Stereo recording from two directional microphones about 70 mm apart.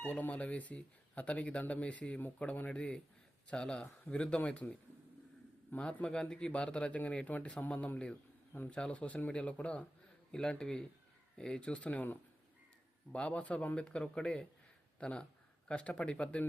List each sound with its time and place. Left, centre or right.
0.0 s speech: left
8.7 s speech: centre